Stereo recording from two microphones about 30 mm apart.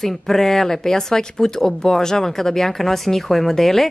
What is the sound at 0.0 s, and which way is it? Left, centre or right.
Speech, centre.